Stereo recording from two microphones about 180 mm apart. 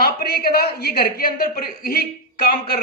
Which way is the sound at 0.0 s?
60° left (ahead or behind).